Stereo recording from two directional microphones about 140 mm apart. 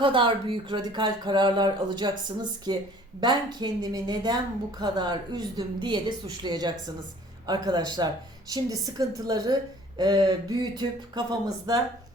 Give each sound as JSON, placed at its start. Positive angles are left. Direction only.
{"t": 0.0, "sound": "a woman's voice", "side_deg": -35}
{"t": 3.2, "sound": "a woman's voice", "side_deg": -30}